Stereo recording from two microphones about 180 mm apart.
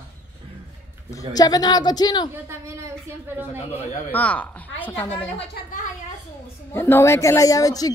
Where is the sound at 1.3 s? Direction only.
20° left (ahead or behind).